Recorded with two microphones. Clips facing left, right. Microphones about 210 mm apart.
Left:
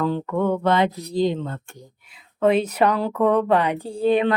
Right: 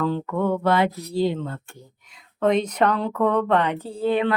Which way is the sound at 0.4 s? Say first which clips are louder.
Left 1 dB; 20° left (ahead or behind).